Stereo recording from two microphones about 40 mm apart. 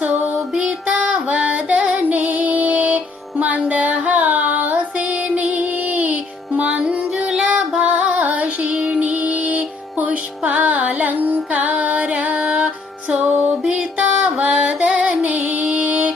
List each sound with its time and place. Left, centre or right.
0.0 s music: right
0.9 s female singing: right
2.0 s music: right
5.5 s female singing: right
6.6 s music: right
7.3 s music: centre
7.8 s music: right